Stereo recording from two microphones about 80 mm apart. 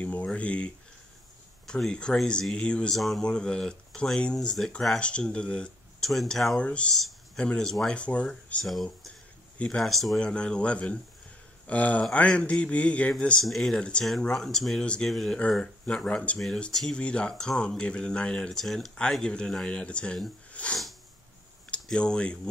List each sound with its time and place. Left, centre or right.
0.0 s a sound: centre
1.7 s speech: centre
3.0 s speech: centre
6.9 s speech: centre
8.0 s speech: centre
8.6 s speech: centre
10.2 s speech: centre
13.4 s speech: centre
13.7 s speech: centre
20.5 s a sound: centre
21.8 s speech: centre